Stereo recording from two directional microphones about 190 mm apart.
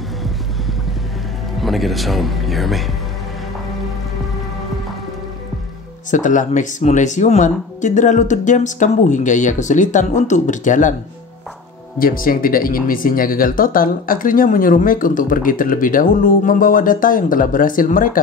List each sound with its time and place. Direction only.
1.6 s speech: centre (ahead or behind)
6.0 s speech: 40° left (ahead or behind)
12.0 s speech: 45° left (ahead or behind)